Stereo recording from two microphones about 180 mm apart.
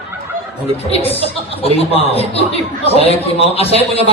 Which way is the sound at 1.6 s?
35° left (ahead or behind).